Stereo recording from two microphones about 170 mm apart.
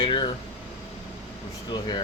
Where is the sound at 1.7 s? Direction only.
25° left (ahead or behind).